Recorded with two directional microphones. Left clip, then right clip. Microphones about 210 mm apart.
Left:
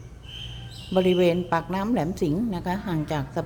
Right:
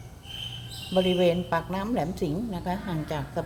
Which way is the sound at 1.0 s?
30° left (ahead or behind).